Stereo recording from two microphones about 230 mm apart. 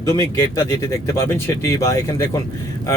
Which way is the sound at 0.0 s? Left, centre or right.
Centre.